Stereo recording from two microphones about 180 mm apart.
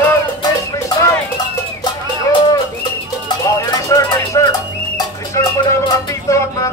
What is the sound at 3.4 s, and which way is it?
Music, 20° left (ahead or behind).